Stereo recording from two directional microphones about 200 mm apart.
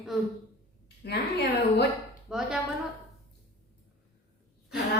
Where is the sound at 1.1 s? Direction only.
55° left (ahead or behind).